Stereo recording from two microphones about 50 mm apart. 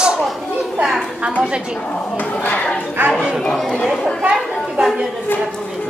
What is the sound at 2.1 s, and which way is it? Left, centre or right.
Speech, left.